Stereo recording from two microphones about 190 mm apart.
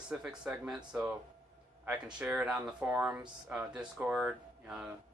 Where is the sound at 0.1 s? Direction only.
5° right (ahead or behind).